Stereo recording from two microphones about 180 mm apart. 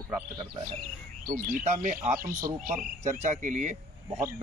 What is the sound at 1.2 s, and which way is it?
Speech, 50° right (ahead or behind).